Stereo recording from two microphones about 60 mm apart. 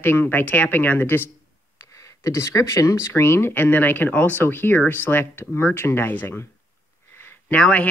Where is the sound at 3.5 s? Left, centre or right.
Left.